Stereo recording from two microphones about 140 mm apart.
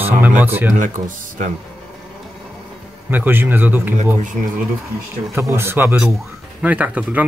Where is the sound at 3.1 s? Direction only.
15° right (ahead or behind).